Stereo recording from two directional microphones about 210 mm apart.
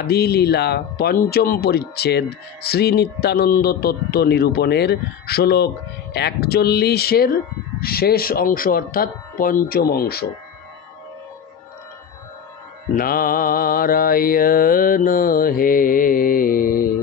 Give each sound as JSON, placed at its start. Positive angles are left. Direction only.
{"t": 0.0, "sound": "speech", "side_deg": 50}
{"t": 12.9, "sound": "speech", "side_deg": 45}